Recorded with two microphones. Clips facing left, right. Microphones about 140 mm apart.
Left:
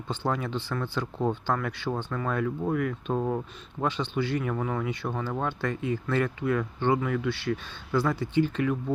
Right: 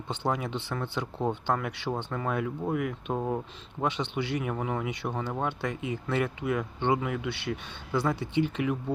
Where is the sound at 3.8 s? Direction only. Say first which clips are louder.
Left 2 dB; 20° right (ahead or behind).